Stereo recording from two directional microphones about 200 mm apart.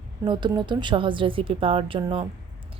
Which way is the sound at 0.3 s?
25° right (ahead or behind).